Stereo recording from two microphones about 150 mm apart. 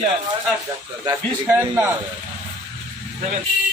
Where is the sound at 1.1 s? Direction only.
20° right (ahead or behind).